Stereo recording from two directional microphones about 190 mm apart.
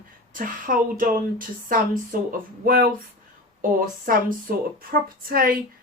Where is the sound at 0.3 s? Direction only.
45° right (ahead or behind).